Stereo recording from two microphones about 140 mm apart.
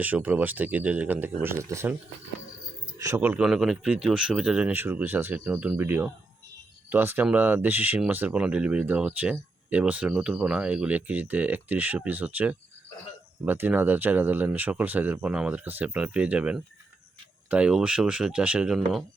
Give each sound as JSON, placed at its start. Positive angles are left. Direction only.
{"t": 0.0, "sound": "speech", "side_deg": -10}
{"t": 3.2, "sound": "speech", "side_deg": -10}